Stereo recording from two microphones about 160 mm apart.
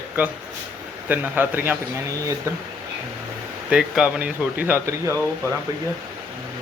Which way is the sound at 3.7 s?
5° right (ahead or behind).